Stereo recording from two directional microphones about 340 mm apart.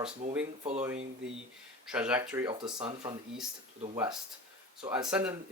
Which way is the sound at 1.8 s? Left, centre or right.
Centre.